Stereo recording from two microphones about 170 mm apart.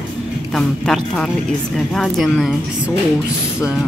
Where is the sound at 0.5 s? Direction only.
5° left (ahead or behind).